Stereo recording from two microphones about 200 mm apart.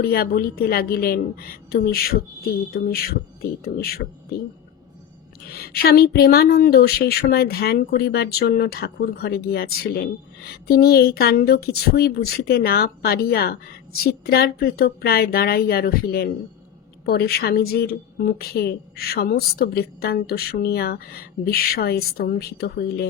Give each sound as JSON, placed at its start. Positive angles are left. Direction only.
{"t": 0.0, "sound": "speech", "side_deg": 50}
{"t": 5.5, "sound": "speech", "side_deg": 50}